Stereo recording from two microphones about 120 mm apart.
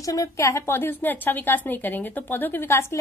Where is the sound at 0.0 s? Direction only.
30° left (ahead or behind).